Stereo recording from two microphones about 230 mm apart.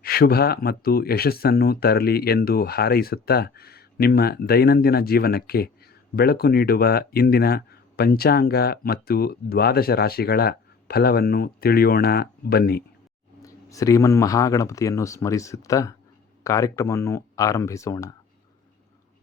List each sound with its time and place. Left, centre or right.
0.0 s speech: left
13.4 s speech: centre